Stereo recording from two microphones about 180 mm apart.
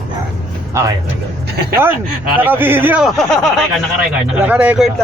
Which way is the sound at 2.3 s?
10° right (ahead or behind).